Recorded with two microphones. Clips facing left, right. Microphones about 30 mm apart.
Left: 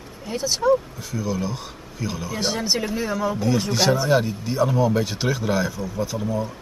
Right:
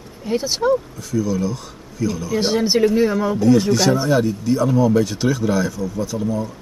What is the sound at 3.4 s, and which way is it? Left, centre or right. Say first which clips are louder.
Speech: right 7 dB; centre.